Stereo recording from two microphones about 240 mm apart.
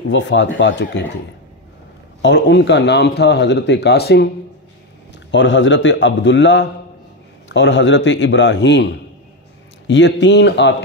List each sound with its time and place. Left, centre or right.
0.1 s speech: left
2.2 s speech: left
5.3 s speech: left